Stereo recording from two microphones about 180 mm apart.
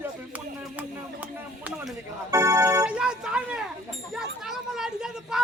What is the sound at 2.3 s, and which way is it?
Speech, 15° right (ahead or behind).